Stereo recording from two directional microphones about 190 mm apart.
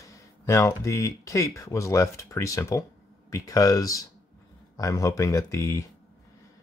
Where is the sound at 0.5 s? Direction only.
15° left (ahead or behind).